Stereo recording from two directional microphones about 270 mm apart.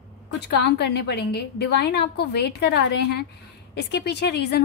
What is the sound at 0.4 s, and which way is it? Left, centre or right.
A woman's voice, left.